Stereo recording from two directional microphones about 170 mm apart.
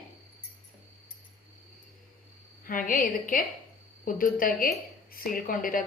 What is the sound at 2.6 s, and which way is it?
A woman's voice, 55° left (ahead or behind).